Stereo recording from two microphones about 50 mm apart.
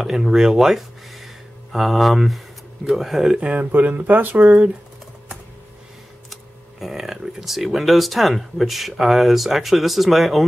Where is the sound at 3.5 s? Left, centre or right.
Right.